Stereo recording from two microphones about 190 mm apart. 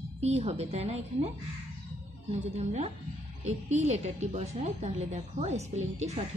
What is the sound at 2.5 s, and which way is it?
A woman's voice, 35° right (ahead or behind).